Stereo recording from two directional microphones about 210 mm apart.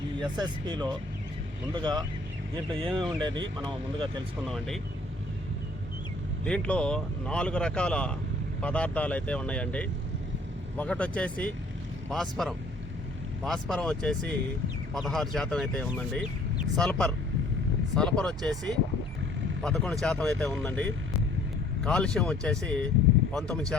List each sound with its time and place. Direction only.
0.2 s speech: 20° right (ahead or behind)
4.4 s speech: centre (ahead or behind)
6.4 s speech: 5° left (ahead or behind)
19.6 s speech: centre (ahead or behind)